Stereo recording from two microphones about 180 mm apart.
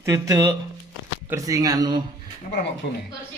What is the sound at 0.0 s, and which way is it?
A woman's voice, 15° right (ahead or behind).